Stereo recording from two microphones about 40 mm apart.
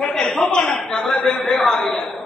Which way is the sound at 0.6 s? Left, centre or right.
Left.